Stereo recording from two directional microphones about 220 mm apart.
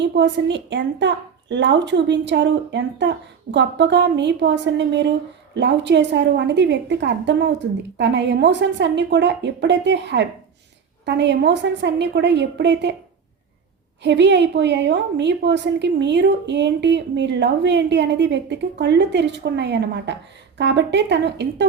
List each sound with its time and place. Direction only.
0.0 s a woman's voice: 55° right (ahead or behind)
14.0 s a woman's voice: 55° right (ahead or behind)